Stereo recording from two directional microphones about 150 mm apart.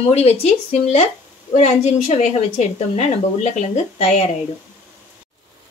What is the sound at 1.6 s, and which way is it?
A woman's voice, 50° left (ahead or behind).